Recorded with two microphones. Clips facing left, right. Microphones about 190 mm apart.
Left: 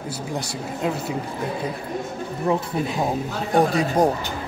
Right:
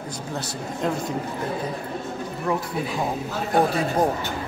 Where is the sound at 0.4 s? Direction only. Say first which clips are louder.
Even; 10° left (ahead or behind).